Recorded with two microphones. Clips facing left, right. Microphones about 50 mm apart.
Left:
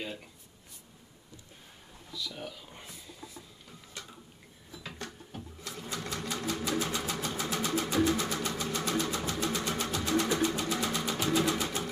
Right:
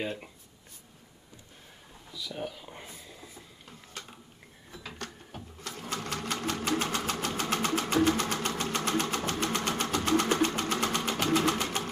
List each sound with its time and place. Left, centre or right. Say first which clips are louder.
0.0 s speech: right 5 dB; right
2.1 s a sound: right 3 dB; centre
5.6 s sewing machine: right 3 dB; right